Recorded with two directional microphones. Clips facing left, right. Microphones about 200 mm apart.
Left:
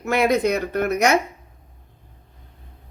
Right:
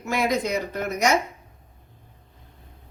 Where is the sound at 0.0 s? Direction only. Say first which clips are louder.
Left 5 dB; 60° left (ahead or behind).